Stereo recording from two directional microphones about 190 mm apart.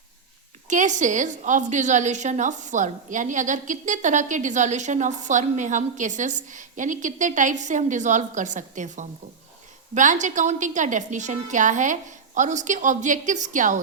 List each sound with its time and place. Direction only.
0.7 s a woman's voice: 40° right (ahead or behind)